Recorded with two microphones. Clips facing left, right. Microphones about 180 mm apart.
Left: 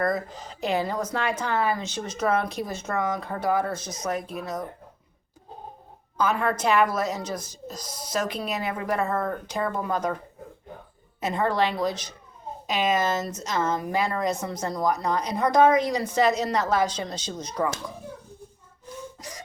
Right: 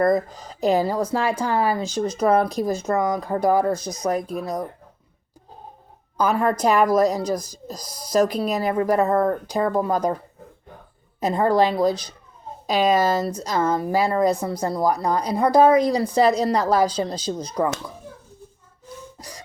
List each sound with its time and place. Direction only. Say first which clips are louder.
0.0 s a woman's voice: right 7 dB; 40° right (ahead or behind)
6.1 s a woman's voice: right 4 dB; 40° right (ahead or behind)
11.2 s a woman's voice: right 6 dB; 35° right (ahead or behind)